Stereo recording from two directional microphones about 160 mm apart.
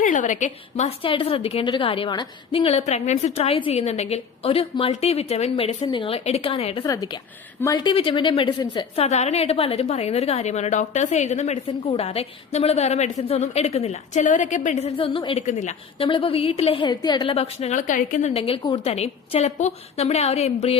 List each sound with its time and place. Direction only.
0.0 s a woman's voice: 50° left (ahead or behind)
1.0 s a woman's voice: 35° left (ahead or behind)
6.8 s a woman's voice: 20° left (ahead or behind)
9.0 s a woman's voice: 45° left (ahead or behind)
16.0 s a woman's voice: 35° left (ahead or behind); by 18.3 s 55° left (ahead or behind)
18.3 s a woman's voice: 35° left (ahead or behind)